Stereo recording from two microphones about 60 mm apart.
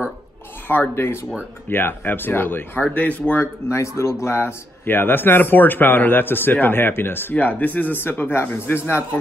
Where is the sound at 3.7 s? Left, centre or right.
Left.